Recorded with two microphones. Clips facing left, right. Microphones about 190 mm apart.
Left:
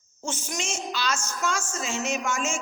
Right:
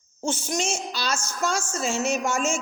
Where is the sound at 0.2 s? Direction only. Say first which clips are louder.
Right 6 dB; 35° right (ahead or behind).